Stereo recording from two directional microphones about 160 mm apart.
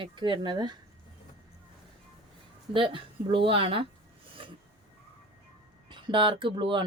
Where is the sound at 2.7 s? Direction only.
30° right (ahead or behind).